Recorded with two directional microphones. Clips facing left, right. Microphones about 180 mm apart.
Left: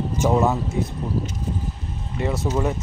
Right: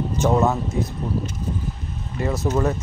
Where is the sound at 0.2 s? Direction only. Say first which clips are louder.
Even; 10° left (ahead or behind).